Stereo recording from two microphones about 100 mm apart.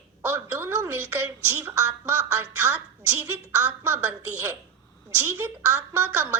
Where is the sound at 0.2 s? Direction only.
20° right (ahead or behind).